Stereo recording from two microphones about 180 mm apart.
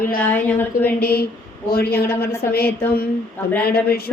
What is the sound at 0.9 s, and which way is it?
Speech, 60° left (ahead or behind).